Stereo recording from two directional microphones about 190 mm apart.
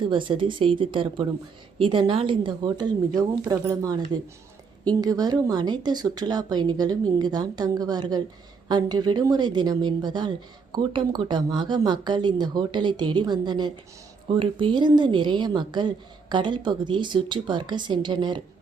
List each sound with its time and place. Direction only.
0.0 s a woman's voice: 25° right (ahead or behind)